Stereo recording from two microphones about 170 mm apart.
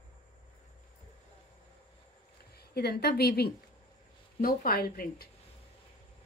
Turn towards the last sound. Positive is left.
turn(degrees=60)  # may be behind; listen again after turning